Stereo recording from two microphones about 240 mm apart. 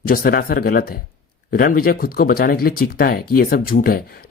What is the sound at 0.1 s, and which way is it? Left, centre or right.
Speech, left.